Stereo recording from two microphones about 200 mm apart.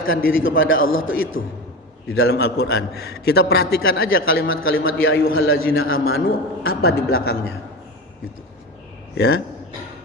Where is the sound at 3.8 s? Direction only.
80° left.